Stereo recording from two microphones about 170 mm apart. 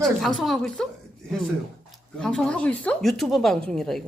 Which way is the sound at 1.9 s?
5° left (ahead or behind).